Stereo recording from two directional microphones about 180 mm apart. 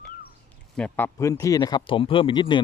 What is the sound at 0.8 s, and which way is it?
Speech, 10° left (ahead or behind).